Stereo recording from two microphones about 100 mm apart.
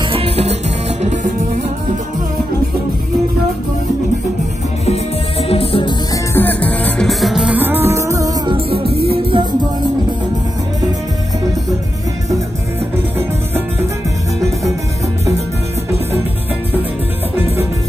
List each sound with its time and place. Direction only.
0.1 s music: 80° right
4.8 s music: 85° left; by 5.9 s 65° left (ahead or behind)
6.3 s music: 15° left (ahead or behind)
7.1 s music: centre (ahead or behind)
7.5 s music: 20° right (ahead or behind)
8.5 s music: 65° right (ahead or behind)